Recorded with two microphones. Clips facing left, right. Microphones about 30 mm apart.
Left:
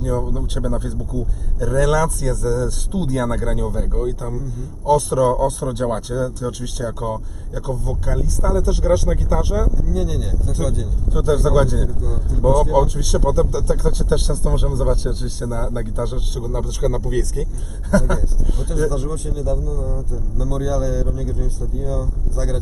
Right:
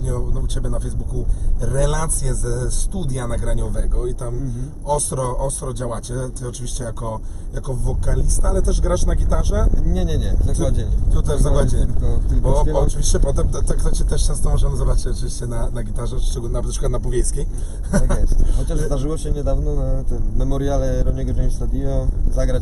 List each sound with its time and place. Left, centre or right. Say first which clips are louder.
0.0 s a sound: left 5 dB; centre
0.3 s a man's voice: left 5 dB; left
1.6 s speech: left 5 dB; centre
9.9 s speech: left 1 dB; centre
11.1 s speech: left 5 dB; centre
13.0 s a man's voice: left 4 dB; centre
18.2 s speech: left 1 dB; centre